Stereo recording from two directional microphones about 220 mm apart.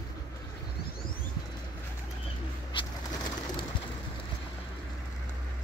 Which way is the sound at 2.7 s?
20° left (ahead or behind).